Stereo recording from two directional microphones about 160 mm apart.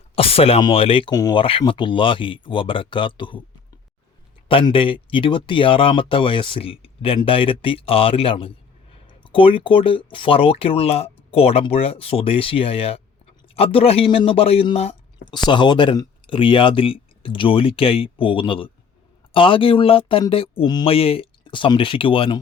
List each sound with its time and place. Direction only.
0.2 s speech: 35° left (ahead or behind)
4.4 s speech: 35° left (ahead or behind)
15.3 s speech: 30° left (ahead or behind)